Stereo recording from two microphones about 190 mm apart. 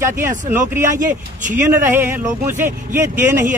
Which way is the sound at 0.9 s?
40° right (ahead or behind).